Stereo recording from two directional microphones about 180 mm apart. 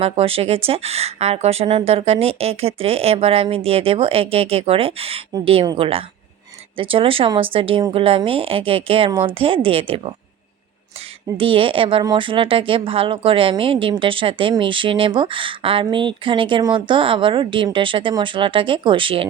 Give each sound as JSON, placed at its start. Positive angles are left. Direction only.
{"t": 0.0, "sound": "speech", "side_deg": -35}
{"t": 11.3, "sound": "speech", "side_deg": -30}